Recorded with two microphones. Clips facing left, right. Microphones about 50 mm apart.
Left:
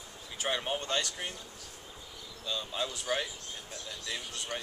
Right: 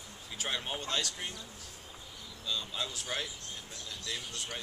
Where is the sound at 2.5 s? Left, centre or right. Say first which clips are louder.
Left 2 dB; centre.